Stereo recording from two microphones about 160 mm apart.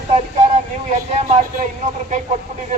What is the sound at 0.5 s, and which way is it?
Vehicle, 45° right (ahead or behind).